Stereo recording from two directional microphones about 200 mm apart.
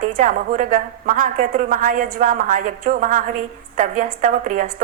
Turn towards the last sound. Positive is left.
turn(degrees=-40)  # may be behind; listen again after turning